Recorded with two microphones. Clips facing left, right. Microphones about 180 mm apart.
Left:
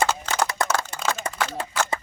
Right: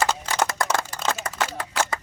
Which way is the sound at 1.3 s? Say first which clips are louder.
Left 2 dB; 25° left (ahead or behind).